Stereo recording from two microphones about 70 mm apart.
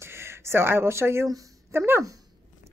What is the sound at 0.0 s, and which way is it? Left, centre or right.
Speech, right.